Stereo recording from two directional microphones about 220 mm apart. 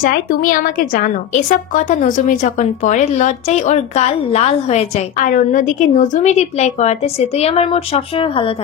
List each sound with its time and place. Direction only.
0.0 s a woman's voice: 40° left (ahead or behind); by 8.5 s 25° left (ahead or behind)